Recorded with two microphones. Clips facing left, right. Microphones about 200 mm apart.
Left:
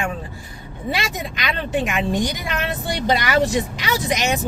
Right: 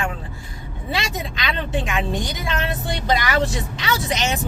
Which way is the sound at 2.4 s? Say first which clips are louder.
Even; 25° right (ahead or behind).